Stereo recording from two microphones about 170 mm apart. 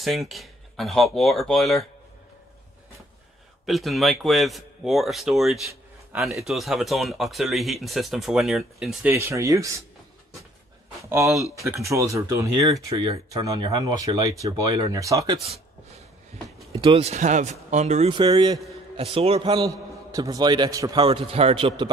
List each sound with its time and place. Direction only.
0.0 s speech: centre (ahead or behind)
3.6 s speech: centre (ahead or behind)
9.1 s speech: 15° right (ahead or behind)
11.0 s a man's voice: 15° right (ahead or behind)
16.3 s speech: 40° right (ahead or behind)
18.1 s a man's voice: 30° right (ahead or behind)